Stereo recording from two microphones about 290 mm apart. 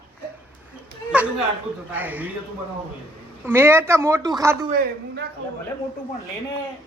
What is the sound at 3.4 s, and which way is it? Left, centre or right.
Speech, centre.